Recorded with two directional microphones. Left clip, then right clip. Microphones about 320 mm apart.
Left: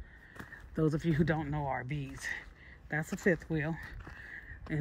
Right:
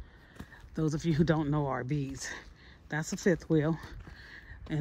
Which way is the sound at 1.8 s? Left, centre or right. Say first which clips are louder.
Right 4 dB; centre.